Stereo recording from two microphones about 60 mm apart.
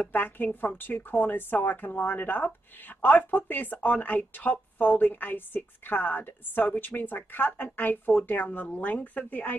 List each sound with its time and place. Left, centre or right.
0.0 s a woman's voice: left